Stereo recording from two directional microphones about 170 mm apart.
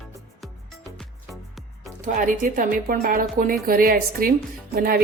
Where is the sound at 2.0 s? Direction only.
50° right (ahead or behind).